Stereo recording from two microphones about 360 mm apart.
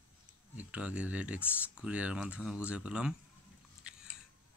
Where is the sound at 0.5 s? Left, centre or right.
Centre.